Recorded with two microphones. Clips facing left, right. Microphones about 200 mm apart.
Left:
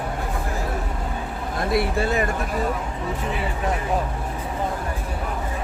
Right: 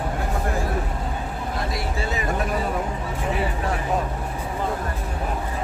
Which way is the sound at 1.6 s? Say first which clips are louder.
Left 6 dB; 55° left (ahead or behind).